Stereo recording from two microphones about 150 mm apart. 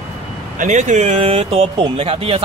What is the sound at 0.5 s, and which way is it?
Speech, 55° right (ahead or behind).